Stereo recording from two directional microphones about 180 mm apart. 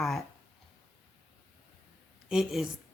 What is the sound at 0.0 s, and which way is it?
Speech, centre (ahead or behind).